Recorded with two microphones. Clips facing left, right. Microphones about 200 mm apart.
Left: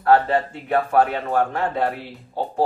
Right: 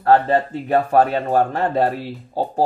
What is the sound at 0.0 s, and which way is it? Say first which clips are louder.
Speech: right 2 dB; 40° right (ahead or behind).